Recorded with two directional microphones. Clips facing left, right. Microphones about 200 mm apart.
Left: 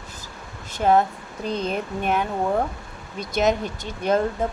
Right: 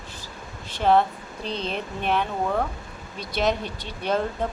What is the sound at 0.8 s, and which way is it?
Speech, 10° left (ahead or behind).